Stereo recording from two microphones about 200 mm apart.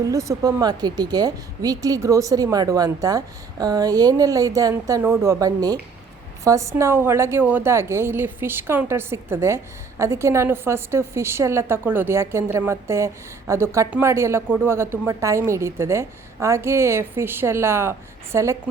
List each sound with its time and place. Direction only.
0.0 s a woman's voice: 15° right (ahead or behind)